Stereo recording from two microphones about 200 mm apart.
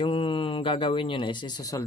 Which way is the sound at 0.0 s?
25° left (ahead or behind).